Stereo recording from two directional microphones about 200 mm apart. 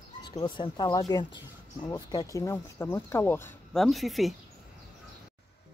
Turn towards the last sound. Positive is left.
turn(degrees=0)  # may be behind; listen again after turning